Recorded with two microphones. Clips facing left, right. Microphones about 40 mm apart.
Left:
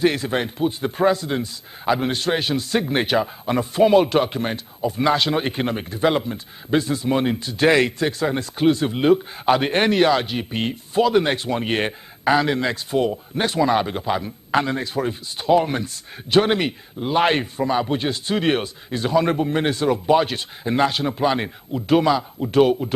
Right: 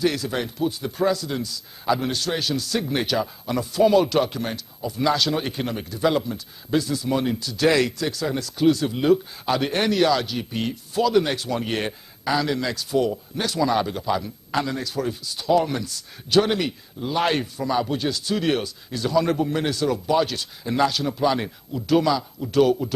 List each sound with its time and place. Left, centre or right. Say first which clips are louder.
0.0 s a man's voice: left 3 dB; left